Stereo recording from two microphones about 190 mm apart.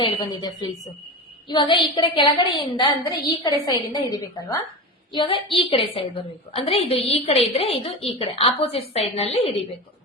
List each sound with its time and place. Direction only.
0.0 s a woman's voice: 20° left (ahead or behind)